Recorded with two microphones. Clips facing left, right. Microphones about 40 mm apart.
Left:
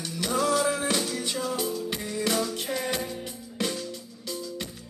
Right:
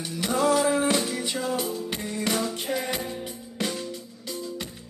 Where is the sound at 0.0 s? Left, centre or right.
Centre.